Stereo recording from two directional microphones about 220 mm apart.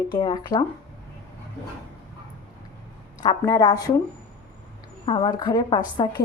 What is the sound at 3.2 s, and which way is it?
Speech, 15° left (ahead or behind).